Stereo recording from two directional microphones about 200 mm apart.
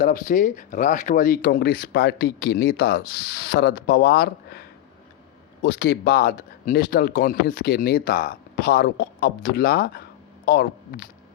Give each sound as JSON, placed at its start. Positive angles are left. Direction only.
{"t": 0.0, "sound": "speech", "side_deg": 40}
{"t": 5.6, "sound": "speech", "side_deg": 55}